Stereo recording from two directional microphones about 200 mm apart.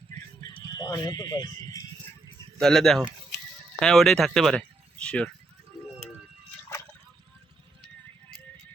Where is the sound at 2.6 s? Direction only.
Centre (ahead or behind).